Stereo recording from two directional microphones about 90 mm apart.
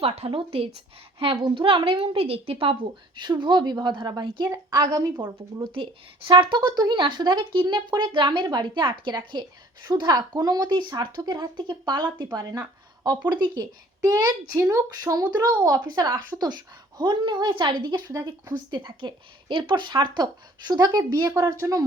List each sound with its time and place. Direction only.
0.0 s a woman's voice: 90° right
3.2 s speech: 60° right (ahead or behind)
4.7 s a woman's voice: 45° right (ahead or behind)
5.4 s speech: 65° right (ahead or behind)
8.4 s a woman's voice: 50° right (ahead or behind)
16.5 s speech: 55° right (ahead or behind)
18.1 s speech: 35° right (ahead or behind)
18.7 s speech: 65° right (ahead or behind); by 21.8 s 35° right (ahead or behind)